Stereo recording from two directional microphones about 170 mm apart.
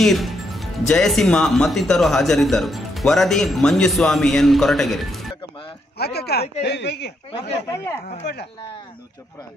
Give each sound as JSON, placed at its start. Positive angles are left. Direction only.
{"t": 0.0, "sound": "speech", "side_deg": 0}
{"t": 5.9, "sound": "speech", "side_deg": 70}
{"t": 6.6, "sound": "speech", "side_deg": 85}
{"t": 7.6, "sound": "speech", "side_deg": 15}